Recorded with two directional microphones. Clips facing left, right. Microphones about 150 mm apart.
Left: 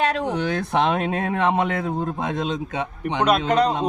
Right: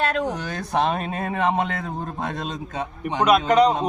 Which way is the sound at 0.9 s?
85° left.